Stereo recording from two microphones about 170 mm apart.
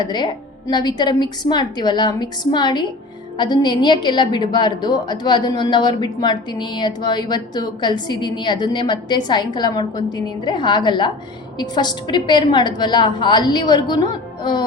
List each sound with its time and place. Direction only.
0.0 s a woman's voice: 25° left (ahead or behind)